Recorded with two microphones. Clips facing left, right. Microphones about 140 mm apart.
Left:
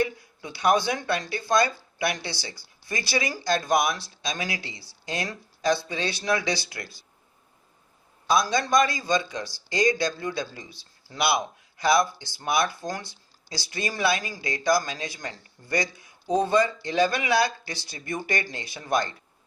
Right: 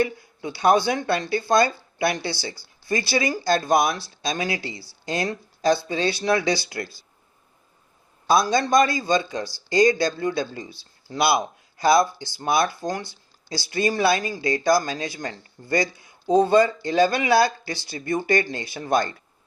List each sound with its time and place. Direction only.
0.2 s speech: 30° right (ahead or behind)
8.3 s speech: 30° right (ahead or behind)